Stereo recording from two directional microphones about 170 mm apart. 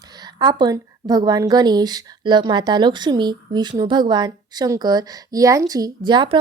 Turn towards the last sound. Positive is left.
turn(degrees=-25)  # may be behind; listen again after turning